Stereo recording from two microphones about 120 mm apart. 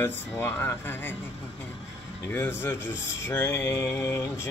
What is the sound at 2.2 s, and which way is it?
Speech, 20° left (ahead or behind).